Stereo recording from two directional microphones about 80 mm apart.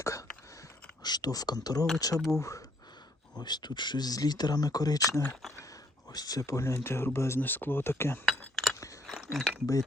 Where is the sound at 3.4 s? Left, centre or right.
Left.